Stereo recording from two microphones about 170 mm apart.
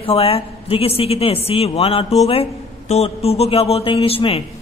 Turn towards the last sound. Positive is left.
turn(degrees=35)  # may be behind; listen again after turning